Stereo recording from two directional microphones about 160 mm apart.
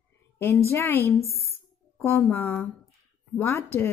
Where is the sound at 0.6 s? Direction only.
15° left (ahead or behind).